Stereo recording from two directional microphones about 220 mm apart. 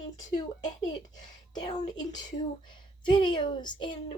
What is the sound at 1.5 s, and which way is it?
Speech, 20° left (ahead or behind).